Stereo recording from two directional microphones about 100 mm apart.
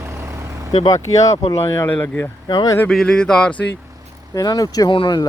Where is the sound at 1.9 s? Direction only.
20° left (ahead or behind).